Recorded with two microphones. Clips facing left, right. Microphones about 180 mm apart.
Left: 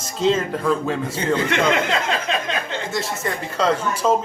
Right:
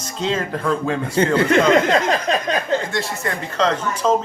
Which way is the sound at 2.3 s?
40° right (ahead or behind).